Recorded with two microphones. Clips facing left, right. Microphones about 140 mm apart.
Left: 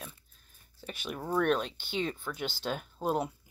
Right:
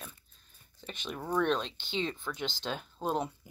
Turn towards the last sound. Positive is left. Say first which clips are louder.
# left 2 dB
turn(degrees=5)  # may be behind; listen again after turning